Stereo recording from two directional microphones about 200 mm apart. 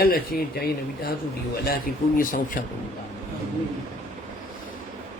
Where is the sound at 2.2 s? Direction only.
45° left (ahead or behind).